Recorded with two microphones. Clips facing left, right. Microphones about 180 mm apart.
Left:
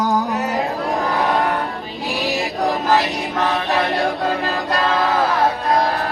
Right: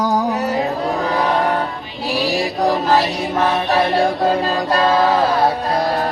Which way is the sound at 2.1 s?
35° right (ahead or behind).